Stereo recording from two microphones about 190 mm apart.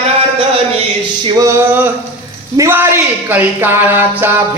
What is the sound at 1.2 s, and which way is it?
Speech, 15° right (ahead or behind).